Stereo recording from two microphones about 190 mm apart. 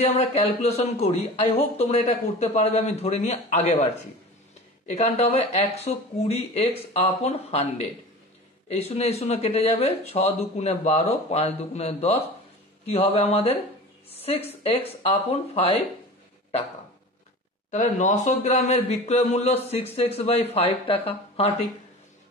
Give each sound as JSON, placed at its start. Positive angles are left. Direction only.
{"t": 0.0, "sound": "speech", "side_deg": 35}
{"t": 17.6, "sound": "speech", "side_deg": 40}